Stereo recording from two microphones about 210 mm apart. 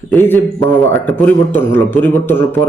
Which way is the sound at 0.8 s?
10° left (ahead or behind).